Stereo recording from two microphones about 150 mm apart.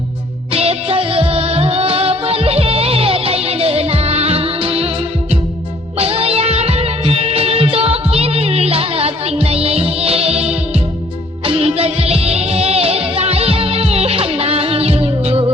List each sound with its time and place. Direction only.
0.5 s music: 40° right (ahead or behind)